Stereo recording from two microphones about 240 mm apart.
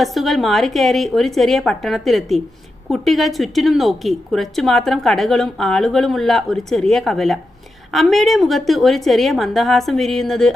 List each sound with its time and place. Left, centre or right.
0.0 s a woman's voice: centre